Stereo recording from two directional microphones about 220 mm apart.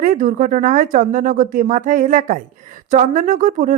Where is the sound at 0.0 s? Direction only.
35° right (ahead or behind).